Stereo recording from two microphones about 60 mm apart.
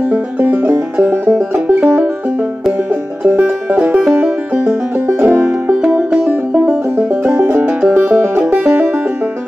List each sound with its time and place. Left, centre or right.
0.1 s music: right
1.0 s music: right
3.3 s music: centre
4.2 s music: right
7.3 s music: right
7.9 s music: right